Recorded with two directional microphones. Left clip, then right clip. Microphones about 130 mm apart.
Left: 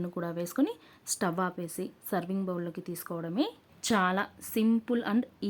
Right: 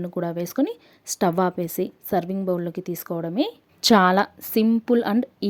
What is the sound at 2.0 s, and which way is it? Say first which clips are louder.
A woman's voice: right 9 dB; 25° right (ahead or behind).